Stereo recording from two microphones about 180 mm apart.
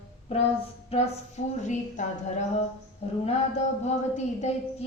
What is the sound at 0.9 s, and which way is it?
Speech, 35° left (ahead or behind).